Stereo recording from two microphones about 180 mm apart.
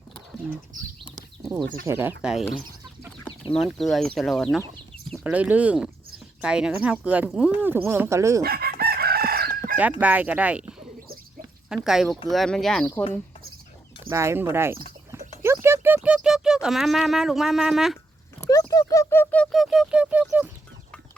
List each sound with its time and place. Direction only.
1.0 s chicken: centre (ahead or behind)
1.9 s speech: 10° right (ahead or behind)
3.5 s speech: centre (ahead or behind); by 8.4 s 15° right (ahead or behind)
8.4 s chicken: 60° right (ahead or behind)
10.0 s speech: 10° right (ahead or behind)
14.0 s speech: 15° right (ahead or behind)
15.6 s a sound: 15° right (ahead or behind)
18.3 s a sound: 20° left (ahead or behind)
18.7 s speech: 20° left (ahead or behind); by 20.5 s 10° right (ahead or behind)